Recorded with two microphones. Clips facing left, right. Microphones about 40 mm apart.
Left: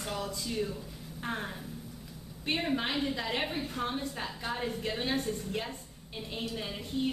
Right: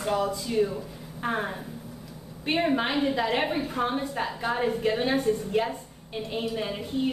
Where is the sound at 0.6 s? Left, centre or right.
Centre.